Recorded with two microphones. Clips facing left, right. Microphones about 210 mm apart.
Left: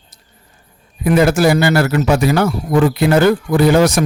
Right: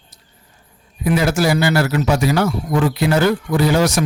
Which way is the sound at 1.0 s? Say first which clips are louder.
Left 5 dB; 55° left (ahead or behind).